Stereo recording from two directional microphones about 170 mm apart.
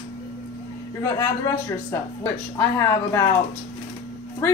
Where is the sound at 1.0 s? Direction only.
20° left (ahead or behind).